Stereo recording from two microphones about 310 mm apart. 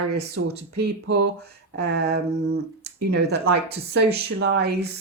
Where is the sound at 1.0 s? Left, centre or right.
Right.